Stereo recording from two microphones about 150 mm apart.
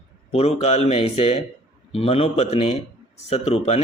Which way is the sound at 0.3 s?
45° left (ahead or behind).